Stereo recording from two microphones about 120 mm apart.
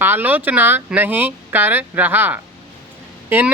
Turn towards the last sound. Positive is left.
turn(degrees=-15)  # may be behind; listen again after turning